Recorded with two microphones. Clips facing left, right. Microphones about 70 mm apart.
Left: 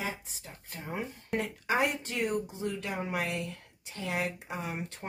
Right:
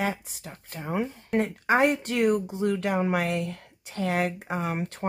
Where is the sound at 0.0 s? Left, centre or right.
Right.